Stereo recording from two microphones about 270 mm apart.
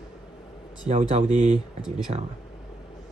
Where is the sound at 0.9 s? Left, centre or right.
Right.